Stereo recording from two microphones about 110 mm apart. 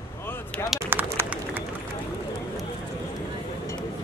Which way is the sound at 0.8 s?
15° right (ahead or behind).